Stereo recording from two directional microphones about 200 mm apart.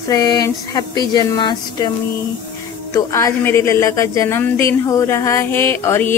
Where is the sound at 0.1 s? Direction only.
20° left (ahead or behind).